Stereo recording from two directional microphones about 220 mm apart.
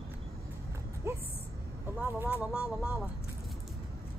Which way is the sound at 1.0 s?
15° right (ahead or behind).